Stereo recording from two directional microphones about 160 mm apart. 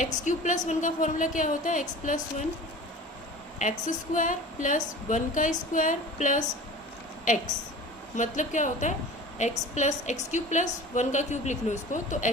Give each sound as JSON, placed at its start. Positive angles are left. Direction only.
{"t": 0.0, "sound": "a woman's voice", "side_deg": 50}
{"t": 3.6, "sound": "a woman's voice", "side_deg": 50}